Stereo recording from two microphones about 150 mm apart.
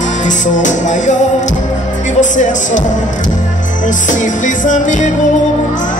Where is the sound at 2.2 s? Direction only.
55° left (ahead or behind).